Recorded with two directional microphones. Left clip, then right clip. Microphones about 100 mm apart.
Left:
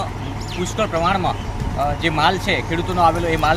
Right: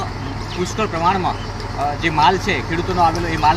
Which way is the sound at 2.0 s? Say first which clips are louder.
Right 3 dB; 45° left (ahead or behind).